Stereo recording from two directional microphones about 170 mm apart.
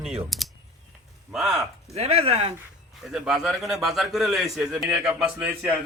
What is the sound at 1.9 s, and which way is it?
Speech, 40° right (ahead or behind).